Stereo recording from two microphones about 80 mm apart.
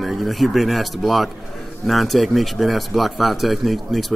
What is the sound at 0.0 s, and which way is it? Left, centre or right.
Speech, centre.